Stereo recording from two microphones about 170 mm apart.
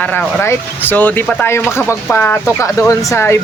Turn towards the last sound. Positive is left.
turn(degrees=15)  # may be behind; listen again after turning